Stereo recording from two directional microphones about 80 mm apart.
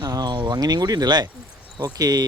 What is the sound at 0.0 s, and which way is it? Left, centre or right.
Speech, right.